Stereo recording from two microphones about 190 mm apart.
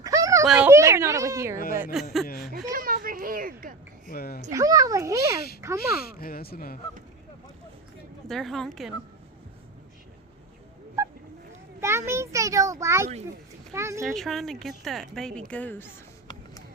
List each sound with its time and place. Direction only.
0.0 s a sound: 15° right (ahead or behind)
1.7 s a child's voice: 5° right (ahead or behind)
2.6 s a child's voice: 50° right (ahead or behind)
4.1 s speech: 55° left (ahead or behind)
4.5 s a child's voice: 15° right (ahead or behind)
6.1 s speech: 50° left (ahead or behind)
8.3 s speech: centre (ahead or behind)
11.8 s a child's voice: 15° right (ahead or behind)
14.0 s a woman's voice: centre (ahead or behind)